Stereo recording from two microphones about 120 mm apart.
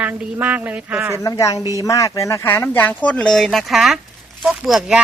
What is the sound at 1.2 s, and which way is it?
Speech, 25° left (ahead or behind).